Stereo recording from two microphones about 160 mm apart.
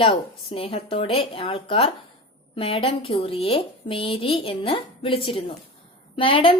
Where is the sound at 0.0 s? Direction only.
35° left (ahead or behind).